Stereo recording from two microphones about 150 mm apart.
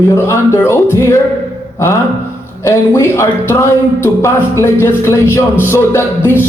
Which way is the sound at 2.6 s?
20° left (ahead or behind).